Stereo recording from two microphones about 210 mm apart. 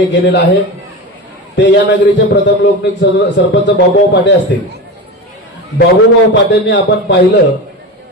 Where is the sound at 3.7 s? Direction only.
55° left (ahead or behind).